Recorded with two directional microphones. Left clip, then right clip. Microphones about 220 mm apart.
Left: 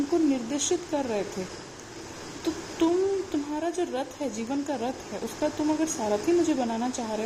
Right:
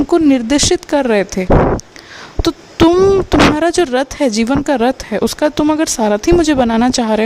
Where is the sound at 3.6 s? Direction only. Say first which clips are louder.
Right 16 dB; 45° right (ahead or behind).